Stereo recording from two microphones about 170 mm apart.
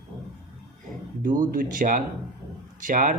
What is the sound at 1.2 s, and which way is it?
Speech, 55° right (ahead or behind).